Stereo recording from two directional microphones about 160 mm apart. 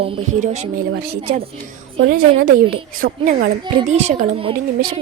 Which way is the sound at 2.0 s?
70° right (ahead or behind).